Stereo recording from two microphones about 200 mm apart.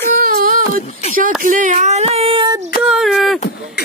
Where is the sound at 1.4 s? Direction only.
40° right (ahead or behind); by 2.6 s 25° right (ahead or behind).